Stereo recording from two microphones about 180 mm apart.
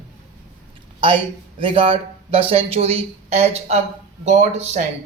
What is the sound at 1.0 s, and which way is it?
Speech, 30° right (ahead or behind).